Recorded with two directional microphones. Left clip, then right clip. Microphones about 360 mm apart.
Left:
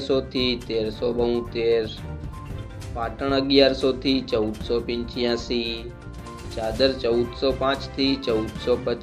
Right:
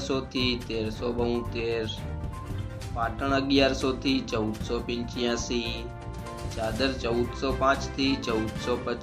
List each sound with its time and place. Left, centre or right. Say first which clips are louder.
0.0 s speech: left 5 dB; centre
3.0 s speech: left 3 dB; centre
5.5 s speech: left 4 dB; right
6.6 s speech: left 7 dB; centre